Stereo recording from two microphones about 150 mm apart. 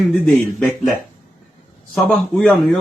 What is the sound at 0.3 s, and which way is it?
Speech, centre (ahead or behind).